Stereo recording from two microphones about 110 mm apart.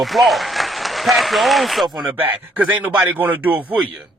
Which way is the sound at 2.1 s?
15° right (ahead or behind).